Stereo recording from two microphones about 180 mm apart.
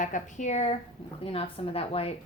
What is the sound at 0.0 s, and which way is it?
A woman's voice, 45° left (ahead or behind).